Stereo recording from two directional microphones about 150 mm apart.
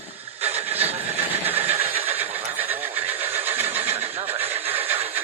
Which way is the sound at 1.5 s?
15° right (ahead or behind).